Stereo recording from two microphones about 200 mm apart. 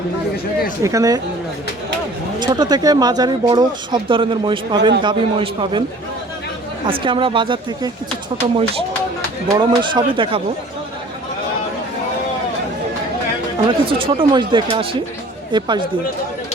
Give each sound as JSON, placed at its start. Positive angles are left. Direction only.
{"t": 0.8, "sound": "speech", "side_deg": -15}
{"t": 2.4, "sound": "speech", "side_deg": -20}
{"t": 6.8, "sound": "speech", "side_deg": -25}
{"t": 9.5, "sound": "speech", "side_deg": -20}
{"t": 13.7, "sound": "speech", "side_deg": -25}